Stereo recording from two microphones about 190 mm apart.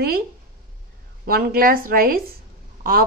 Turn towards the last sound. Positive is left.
turn(degrees=-50)  # may be behind; listen again after turning